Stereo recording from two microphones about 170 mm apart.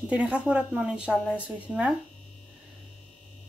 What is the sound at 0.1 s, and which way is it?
Speech, 5° right (ahead or behind).